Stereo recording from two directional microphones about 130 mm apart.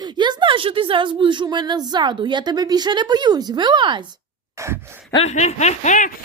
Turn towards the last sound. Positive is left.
turn(degrees=75)  # may be behind; listen again after turning